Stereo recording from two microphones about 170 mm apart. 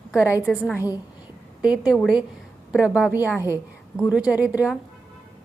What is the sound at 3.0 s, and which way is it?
A woman's voice, 10° right (ahead or behind).